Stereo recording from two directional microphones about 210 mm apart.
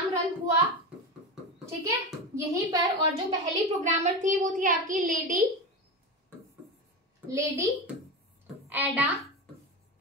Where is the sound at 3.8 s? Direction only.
35° right (ahead or behind).